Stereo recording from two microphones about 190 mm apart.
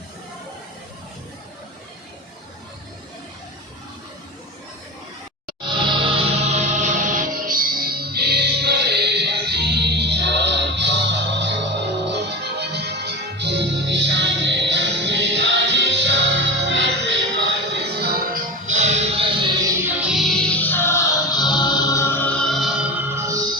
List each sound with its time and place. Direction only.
5.8 s music: 25° right (ahead or behind); by 17.2 s 70° right (ahead or behind)
17.7 s music: 60° right (ahead or behind); by 19.5 s 30° right (ahead or behind)
20.0 s music: 5° right (ahead or behind)